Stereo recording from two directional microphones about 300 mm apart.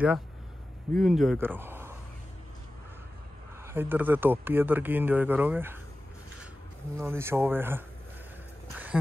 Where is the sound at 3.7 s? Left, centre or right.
Centre.